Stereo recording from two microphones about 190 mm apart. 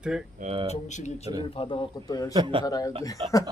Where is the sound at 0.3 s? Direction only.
30° right (ahead or behind).